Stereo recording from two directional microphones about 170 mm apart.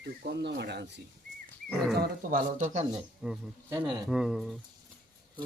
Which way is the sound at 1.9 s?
70° right (ahead or behind).